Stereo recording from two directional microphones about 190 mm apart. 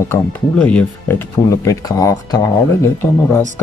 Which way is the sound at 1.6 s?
20° left (ahead or behind).